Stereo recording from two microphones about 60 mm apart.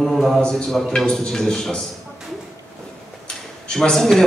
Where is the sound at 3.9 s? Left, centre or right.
Centre.